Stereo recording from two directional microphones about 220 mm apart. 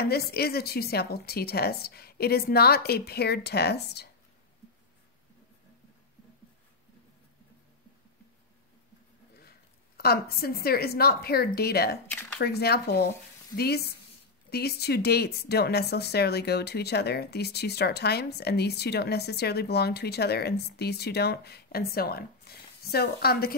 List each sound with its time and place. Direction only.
0.0 s speech: 45° left (ahead or behind)
9.4 s a woman's voice: 45° left (ahead or behind)